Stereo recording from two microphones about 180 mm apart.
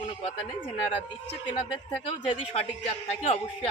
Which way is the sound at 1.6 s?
30° left (ahead or behind).